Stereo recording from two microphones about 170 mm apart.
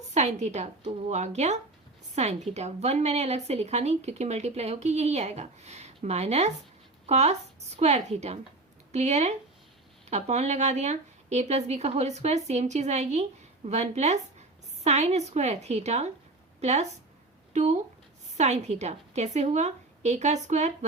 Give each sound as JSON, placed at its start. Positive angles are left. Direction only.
{"t": 0.1, "sound": "a woman's voice", "side_deg": -40}